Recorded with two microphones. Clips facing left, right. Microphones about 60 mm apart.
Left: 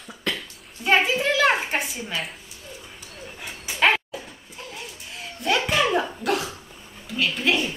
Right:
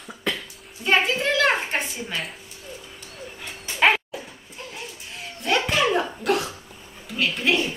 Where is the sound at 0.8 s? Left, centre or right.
Centre.